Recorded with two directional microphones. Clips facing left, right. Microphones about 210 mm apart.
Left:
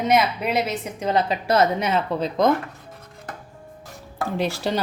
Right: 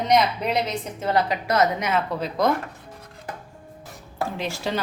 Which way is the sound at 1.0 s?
20° left (ahead or behind).